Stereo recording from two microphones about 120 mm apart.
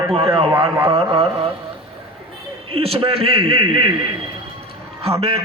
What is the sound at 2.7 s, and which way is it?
A man's voice, 55° right (ahead or behind).